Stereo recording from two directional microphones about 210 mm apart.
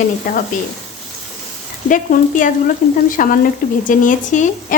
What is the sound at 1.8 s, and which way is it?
Speech, 40° left (ahead or behind).